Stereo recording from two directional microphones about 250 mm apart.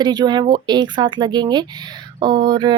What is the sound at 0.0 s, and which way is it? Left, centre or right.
A woman's voice, centre.